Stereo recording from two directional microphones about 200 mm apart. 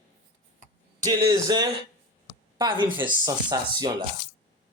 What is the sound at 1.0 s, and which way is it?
Speech, 20° right (ahead or behind).